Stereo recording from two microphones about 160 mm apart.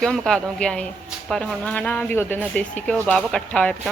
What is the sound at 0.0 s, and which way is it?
Speech, 5° left (ahead or behind).